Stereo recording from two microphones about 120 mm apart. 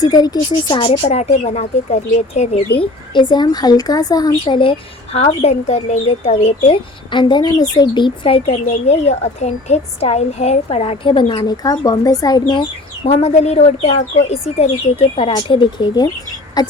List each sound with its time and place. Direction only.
0.0 s speech: 35° left (ahead or behind)
0.9 s speech: 55° left (ahead or behind)
3.2 s speech: 35° left (ahead or behind)
4.4 s speech: 45° left (ahead or behind)
8.6 s speech: 65° left (ahead or behind); by 12.6 s 35° left (ahead or behind)
13.1 s speech: 60° left (ahead or behind)
15.1 s speech: 50° left (ahead or behind)